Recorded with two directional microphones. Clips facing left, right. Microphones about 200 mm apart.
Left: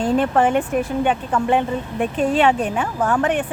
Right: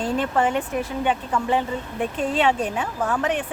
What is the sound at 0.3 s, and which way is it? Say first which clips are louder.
Speech: left 5 dB; 50° left (ahead or behind).